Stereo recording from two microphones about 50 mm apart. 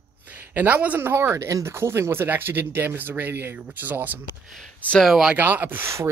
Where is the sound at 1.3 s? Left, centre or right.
Right.